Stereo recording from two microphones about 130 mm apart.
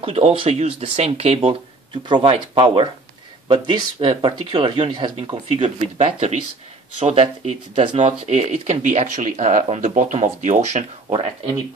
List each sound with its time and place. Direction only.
0.0 s speech: 45° right (ahead or behind)
2.0 s speech: 45° right (ahead or behind); by 10.1 s 85° right
10.1 s speech: 65° right (ahead or behind)
11.1 s speech: 45° right (ahead or behind)